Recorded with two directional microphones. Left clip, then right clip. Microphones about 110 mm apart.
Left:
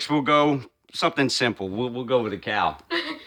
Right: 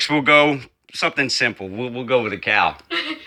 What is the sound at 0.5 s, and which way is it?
Speech, 30° left (ahead or behind).